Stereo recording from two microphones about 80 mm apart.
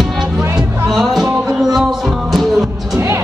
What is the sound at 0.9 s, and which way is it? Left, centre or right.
Music, centre.